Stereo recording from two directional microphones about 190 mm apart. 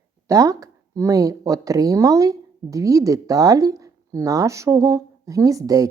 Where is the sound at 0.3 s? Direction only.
15° right (ahead or behind).